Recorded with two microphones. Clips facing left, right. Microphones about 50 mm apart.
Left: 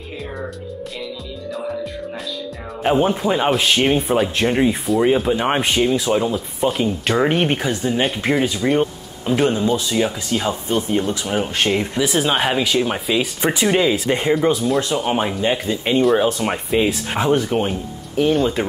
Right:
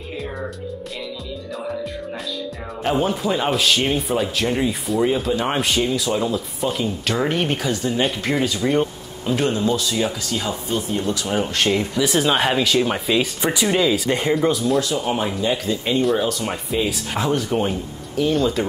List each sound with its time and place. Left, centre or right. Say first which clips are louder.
2.8 s a man's voice: left 4 dB; centre
11.2 s speech: left 1 dB; centre
13.5 s a man's voice: left 3 dB; left
14.8 s a man's voice: left 2 dB; left